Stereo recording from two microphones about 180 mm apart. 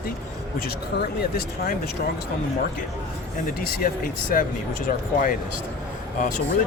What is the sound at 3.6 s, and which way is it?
Speech, 50° left (ahead or behind).